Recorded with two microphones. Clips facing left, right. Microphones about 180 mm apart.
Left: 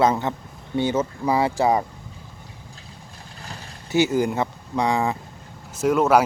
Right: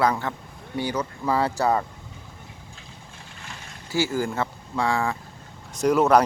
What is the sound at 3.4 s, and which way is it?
Boat, 35° left (ahead or behind).